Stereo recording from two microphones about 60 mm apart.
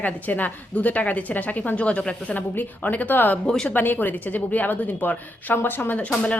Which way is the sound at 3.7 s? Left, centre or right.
Left.